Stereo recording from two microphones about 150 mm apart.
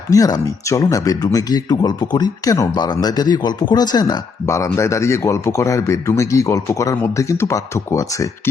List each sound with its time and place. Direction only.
0.1 s speech: 25° left (ahead or behind)